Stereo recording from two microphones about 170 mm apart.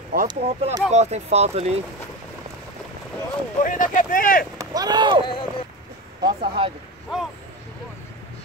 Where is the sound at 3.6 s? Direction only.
50° left (ahead or behind).